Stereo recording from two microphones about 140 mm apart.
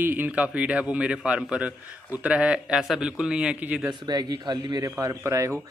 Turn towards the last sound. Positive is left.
turn(degrees=-20)  # may be behind; listen again after turning